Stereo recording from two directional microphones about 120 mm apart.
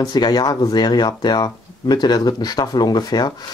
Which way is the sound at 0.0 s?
35° left (ahead or behind).